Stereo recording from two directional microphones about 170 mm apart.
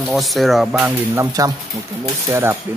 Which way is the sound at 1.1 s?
20° right (ahead or behind).